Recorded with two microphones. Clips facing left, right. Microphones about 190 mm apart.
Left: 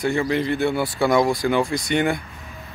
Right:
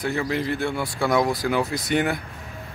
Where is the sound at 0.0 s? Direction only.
Centre (ahead or behind).